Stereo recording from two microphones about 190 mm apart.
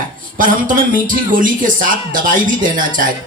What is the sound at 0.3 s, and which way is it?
Speech, 45° right (ahead or behind).